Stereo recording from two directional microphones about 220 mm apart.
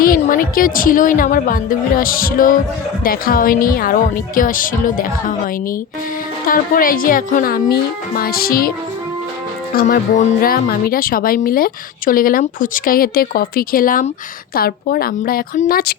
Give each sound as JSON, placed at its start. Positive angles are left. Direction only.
{"t": 0.0, "sound": "speech", "side_deg": 40}
{"t": 6.5, "sound": "speech", "side_deg": 40}
{"t": 9.7, "sound": "speech", "side_deg": 35}